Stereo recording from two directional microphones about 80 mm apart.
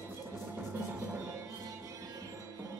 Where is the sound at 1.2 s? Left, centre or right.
Right.